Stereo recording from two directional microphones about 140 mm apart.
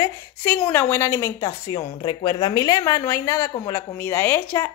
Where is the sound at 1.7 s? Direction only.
35° left (ahead or behind).